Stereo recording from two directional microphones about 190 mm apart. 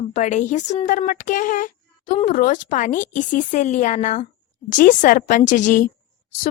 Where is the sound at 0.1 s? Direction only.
40° left (ahead or behind).